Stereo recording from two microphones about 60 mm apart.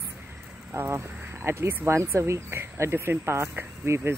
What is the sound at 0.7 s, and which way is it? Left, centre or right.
A woman's voice, right.